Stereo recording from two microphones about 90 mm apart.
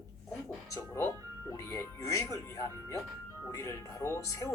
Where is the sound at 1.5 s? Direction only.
35° left (ahead or behind).